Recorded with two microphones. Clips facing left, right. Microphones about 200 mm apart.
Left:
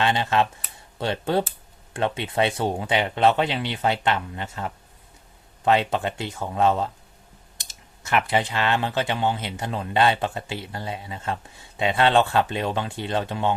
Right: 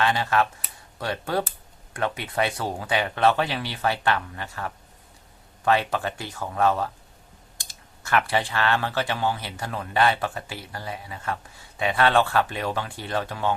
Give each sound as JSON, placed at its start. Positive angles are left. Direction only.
{"t": 0.0, "sound": "speech", "side_deg": 25}